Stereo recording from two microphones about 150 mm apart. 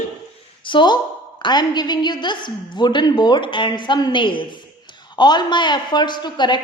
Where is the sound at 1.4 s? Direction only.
30° left (ahead or behind).